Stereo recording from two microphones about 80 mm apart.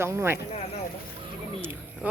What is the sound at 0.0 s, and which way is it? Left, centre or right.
Speech, right.